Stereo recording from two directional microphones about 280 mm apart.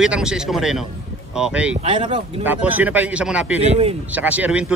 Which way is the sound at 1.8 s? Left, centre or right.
Centre.